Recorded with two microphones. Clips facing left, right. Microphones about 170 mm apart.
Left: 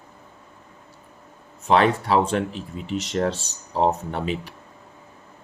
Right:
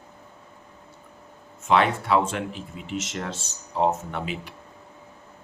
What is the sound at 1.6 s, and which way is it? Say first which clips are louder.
Speech: left 3 dB; 35° left (ahead or behind).